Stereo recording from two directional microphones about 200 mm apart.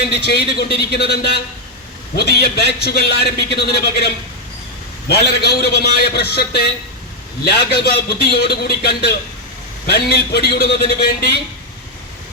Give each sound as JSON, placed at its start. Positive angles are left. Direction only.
{"t": 0.3, "sound": "a man's voice", "side_deg": 50}